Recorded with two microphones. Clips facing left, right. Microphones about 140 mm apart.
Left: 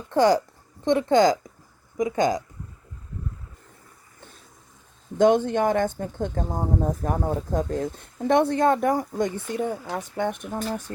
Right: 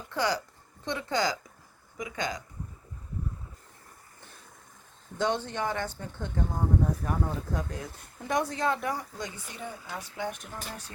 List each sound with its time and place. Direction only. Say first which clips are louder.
0.1 s a woman's voice: left 11 dB; 45° left (ahead or behind)
5.1 s speech: left 11 dB; 50° left (ahead or behind)
8.3 s speech: left 9 dB; 60° left (ahead or behind)